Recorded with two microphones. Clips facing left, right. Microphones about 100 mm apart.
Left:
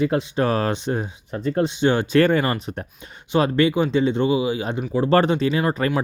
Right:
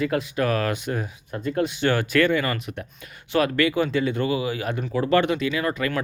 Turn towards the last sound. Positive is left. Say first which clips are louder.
# left 4 dB
turn(degrees=35)  # may be behind; listen again after turning